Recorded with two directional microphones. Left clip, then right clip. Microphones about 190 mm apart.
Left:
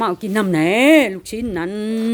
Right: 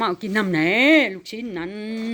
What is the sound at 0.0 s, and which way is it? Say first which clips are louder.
Speech: left 3 dB; 10° left (ahead or behind).